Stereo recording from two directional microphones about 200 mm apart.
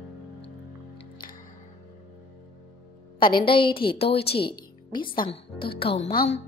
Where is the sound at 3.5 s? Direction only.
25° left (ahead or behind).